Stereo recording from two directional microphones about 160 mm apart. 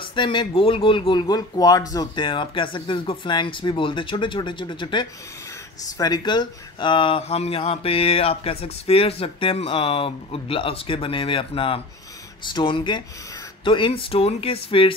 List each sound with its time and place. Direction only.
0.0 s speech: 30° left (ahead or behind)